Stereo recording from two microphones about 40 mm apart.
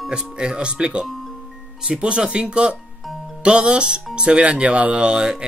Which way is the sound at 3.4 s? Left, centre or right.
Right.